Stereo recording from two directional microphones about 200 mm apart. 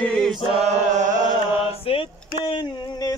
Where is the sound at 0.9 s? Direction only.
40° right (ahead or behind).